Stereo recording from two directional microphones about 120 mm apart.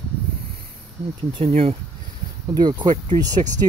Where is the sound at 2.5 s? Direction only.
40° right (ahead or behind).